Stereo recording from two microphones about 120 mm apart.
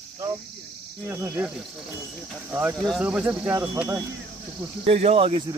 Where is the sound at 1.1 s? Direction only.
20° right (ahead or behind).